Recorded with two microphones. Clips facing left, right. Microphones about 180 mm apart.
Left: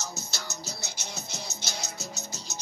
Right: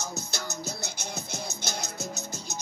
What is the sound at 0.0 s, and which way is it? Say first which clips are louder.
Music: right 3 dB; 55° right (ahead or behind).